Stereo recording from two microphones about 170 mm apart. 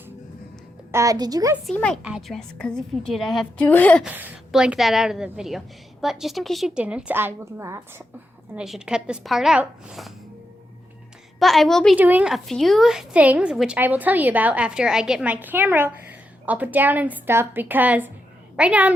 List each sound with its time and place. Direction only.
0.9 s a woman's voice: 20° right (ahead or behind)
1.6 s a woman's voice: 5° left (ahead or behind)
2.0 s a woman's voice: 5° right (ahead or behind)
4.0 s a woman's voice: 10° right (ahead or behind)
8.5 s a woman's voice: 5° right (ahead or behind)
11.3 s a woman's voice: centre (ahead or behind)
11.9 s a woman's voice: 10° right (ahead or behind)